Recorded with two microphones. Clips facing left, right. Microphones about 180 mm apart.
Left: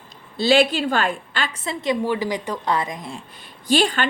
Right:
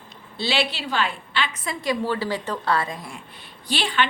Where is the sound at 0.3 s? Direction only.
45° left (ahead or behind).